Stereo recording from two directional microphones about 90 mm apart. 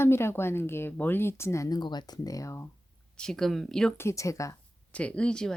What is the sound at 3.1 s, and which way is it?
Speech, 5° left (ahead or behind).